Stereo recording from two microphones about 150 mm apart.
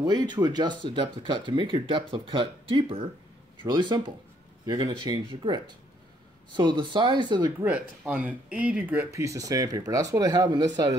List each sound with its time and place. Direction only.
0.0 s speech: 30° right (ahead or behind)
7.6 s speech: 10° right (ahead or behind); by 11.0 s 25° right (ahead or behind)